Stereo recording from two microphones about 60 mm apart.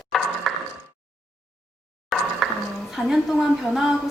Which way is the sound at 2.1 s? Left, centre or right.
Centre.